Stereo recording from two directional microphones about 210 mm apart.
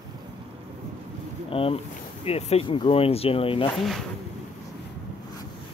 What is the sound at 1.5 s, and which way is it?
Speech, 25° left (ahead or behind).